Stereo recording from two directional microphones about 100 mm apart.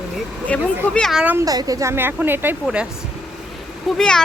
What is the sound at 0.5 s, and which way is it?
Speech, 10° left (ahead or behind).